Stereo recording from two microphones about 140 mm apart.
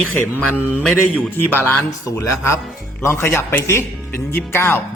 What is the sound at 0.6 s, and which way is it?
Speech, 15° left (ahead or behind).